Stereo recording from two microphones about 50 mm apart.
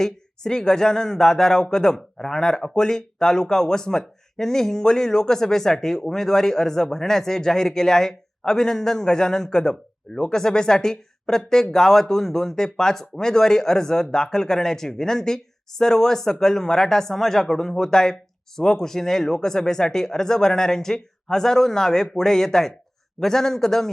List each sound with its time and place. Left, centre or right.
0.0 s speech: centre